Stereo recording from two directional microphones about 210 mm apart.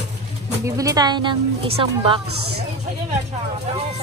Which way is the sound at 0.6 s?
15° right (ahead or behind).